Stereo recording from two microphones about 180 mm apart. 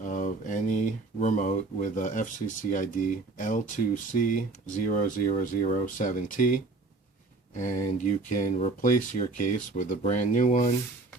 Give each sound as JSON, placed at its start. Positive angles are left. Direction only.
{"t": 0.0, "sound": "speech", "side_deg": 45}